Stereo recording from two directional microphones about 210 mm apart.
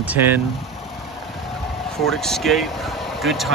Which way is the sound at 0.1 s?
10° right (ahead or behind).